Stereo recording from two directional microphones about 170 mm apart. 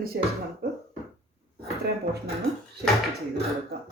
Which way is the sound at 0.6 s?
70° right (ahead or behind).